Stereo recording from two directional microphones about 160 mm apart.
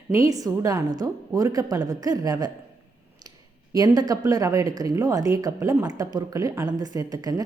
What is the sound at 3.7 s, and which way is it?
A woman's voice, 25° right (ahead or behind).